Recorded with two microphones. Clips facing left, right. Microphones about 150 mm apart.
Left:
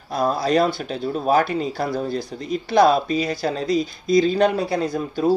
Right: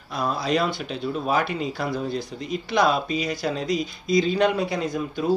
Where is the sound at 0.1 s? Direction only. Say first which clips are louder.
Left 5 dB; 40° left (ahead or behind).